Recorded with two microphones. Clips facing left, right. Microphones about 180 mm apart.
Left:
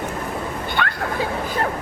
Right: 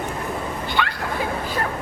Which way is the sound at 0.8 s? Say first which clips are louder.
Even; 50° left (ahead or behind).